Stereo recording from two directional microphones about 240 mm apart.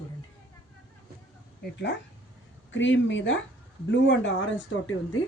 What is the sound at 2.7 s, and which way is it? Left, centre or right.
Speech, left.